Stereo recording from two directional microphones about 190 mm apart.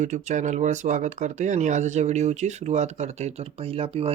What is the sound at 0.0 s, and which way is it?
Speech, 40° right (ahead or behind).